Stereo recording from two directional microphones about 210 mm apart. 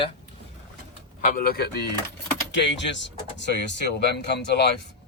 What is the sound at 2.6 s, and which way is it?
Speech, 60° left (ahead or behind).